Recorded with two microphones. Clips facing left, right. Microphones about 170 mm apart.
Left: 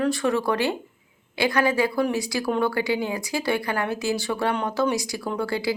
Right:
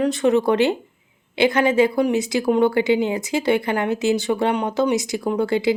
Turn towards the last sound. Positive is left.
turn(degrees=-20)  # may be behind; listen again after turning